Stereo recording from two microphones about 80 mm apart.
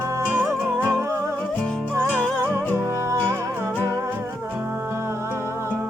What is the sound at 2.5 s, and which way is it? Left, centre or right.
Music, right.